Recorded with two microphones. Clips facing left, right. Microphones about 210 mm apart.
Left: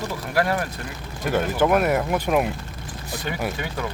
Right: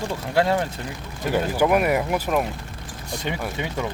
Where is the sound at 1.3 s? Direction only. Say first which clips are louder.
Even; 10° right (ahead or behind).